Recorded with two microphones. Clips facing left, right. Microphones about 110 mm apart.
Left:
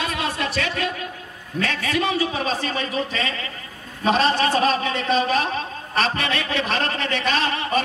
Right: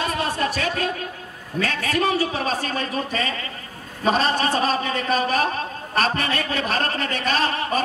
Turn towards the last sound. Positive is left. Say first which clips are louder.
# even
turn(degrees=-40)  # may be behind; listen again after turning